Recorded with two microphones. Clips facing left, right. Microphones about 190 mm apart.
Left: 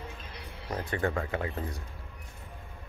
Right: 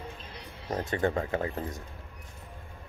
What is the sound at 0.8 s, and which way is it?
Speech, 25° right (ahead or behind).